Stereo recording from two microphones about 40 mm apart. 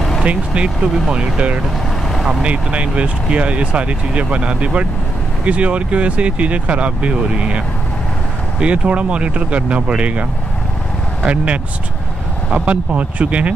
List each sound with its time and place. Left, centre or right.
0.2 s speech: right
2.4 s speech: right
11.2 s speech: right